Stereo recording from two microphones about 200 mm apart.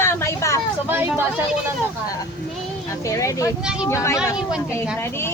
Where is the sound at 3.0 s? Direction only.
15° left (ahead or behind).